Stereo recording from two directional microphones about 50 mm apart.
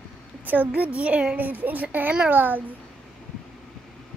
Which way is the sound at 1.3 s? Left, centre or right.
Right.